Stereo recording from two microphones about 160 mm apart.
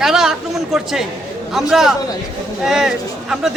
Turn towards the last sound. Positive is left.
turn(degrees=-5)  # may be behind; listen again after turning